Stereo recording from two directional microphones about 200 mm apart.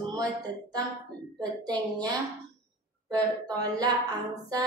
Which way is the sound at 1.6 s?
20° right (ahead or behind).